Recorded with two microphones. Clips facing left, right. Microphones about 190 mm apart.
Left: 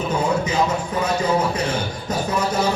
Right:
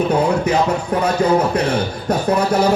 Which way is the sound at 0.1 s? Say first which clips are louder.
Right 5 dB; 60° right (ahead or behind).